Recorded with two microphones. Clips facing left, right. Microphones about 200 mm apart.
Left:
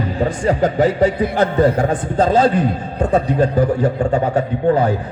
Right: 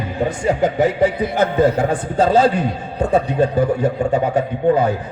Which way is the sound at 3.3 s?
20° right (ahead or behind).